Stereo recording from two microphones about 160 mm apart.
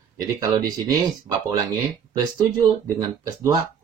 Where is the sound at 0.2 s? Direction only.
25° right (ahead or behind).